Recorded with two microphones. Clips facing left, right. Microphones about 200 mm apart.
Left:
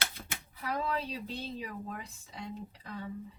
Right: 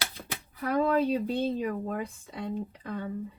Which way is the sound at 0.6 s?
50° right (ahead or behind).